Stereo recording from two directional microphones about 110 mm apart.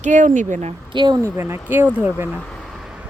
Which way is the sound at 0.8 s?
40° right (ahead or behind).